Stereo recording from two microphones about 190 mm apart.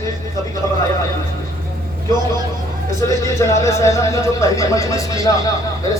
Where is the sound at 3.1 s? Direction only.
15° left (ahead or behind).